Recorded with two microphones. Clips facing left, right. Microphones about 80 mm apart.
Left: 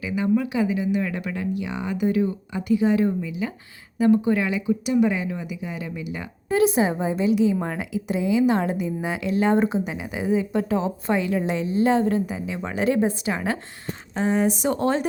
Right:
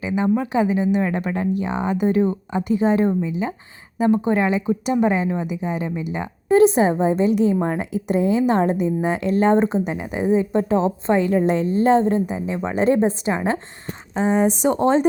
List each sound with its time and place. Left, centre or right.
0.0 s a woman's voice: right
4.2 s a woman's voice: right